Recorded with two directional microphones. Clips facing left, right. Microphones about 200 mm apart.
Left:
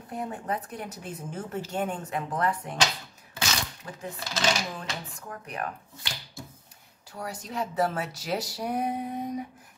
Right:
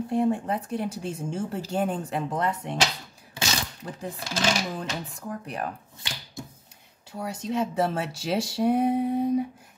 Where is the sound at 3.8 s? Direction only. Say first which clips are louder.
Right 4 dB; 30° right (ahead or behind).